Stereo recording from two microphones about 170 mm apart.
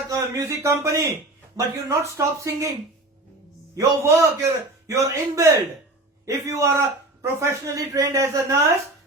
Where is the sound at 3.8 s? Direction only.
20° right (ahead or behind).